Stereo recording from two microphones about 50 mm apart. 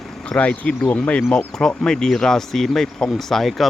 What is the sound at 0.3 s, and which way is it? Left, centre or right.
Speech, left.